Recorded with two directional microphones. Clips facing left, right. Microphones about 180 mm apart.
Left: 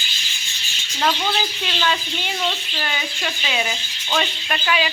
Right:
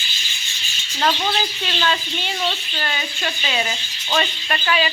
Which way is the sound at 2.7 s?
5° left (ahead or behind).